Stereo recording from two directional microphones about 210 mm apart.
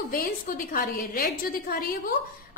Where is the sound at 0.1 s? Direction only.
40° left (ahead or behind).